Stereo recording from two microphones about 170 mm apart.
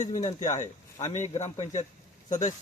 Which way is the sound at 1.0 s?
45° left (ahead or behind).